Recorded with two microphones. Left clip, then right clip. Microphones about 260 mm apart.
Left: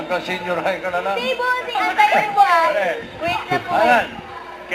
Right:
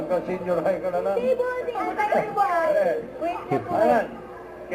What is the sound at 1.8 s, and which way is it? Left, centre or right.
A woman's voice, centre.